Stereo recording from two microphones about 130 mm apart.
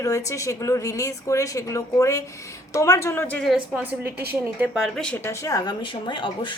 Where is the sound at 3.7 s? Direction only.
15° right (ahead or behind).